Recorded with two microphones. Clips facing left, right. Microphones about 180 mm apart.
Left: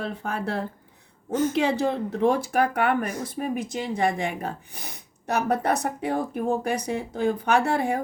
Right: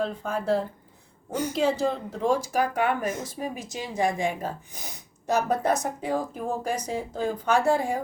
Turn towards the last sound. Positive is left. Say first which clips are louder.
# even
turn(degrees=60)  # may be behind; listen again after turning